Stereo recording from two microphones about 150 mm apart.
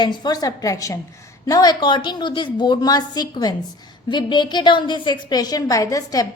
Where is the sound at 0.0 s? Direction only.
30° left (ahead or behind).